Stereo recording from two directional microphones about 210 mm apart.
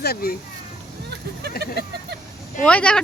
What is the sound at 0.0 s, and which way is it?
Speech, 45° left (ahead or behind).